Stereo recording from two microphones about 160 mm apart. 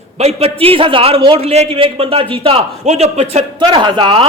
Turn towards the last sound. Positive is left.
turn(degrees=-30)  # may be behind; listen again after turning